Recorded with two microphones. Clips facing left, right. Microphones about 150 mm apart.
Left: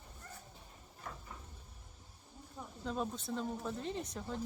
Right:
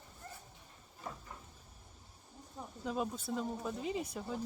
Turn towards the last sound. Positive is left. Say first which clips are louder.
# right 2 dB
turn(degrees=-5)  # may be behind; listen again after turning